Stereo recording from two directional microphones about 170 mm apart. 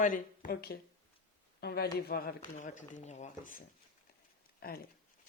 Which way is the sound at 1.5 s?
75° left (ahead or behind).